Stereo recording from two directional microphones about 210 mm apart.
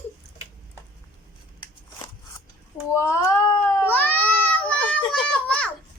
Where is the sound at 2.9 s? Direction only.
15° left (ahead or behind).